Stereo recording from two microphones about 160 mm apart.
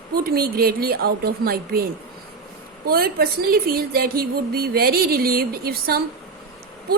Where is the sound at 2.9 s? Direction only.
70° right (ahead or behind).